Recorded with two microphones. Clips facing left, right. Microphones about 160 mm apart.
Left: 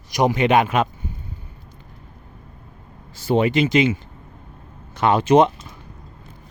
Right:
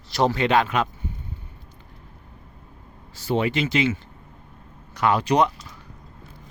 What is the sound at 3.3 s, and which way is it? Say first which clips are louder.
A man's voice: left 5 dB; 20° left (ahead or behind).